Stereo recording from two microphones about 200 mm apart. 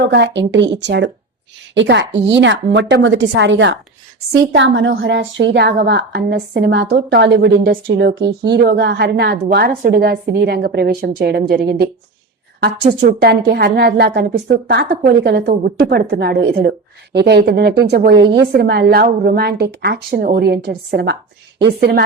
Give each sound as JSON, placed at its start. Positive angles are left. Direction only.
{"t": 0.0, "sound": "a woman's voice", "side_deg": -60}
{"t": 13.0, "sound": "a woman's voice", "side_deg": -55}